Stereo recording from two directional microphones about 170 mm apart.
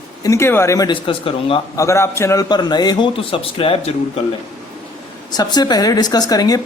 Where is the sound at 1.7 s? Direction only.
15° left (ahead or behind); by 3.9 s 35° left (ahead or behind).